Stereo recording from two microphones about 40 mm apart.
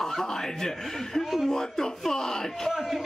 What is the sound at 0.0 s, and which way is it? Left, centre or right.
A man's voice, centre.